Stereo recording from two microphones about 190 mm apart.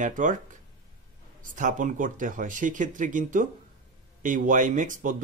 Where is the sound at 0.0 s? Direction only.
45° right (ahead or behind).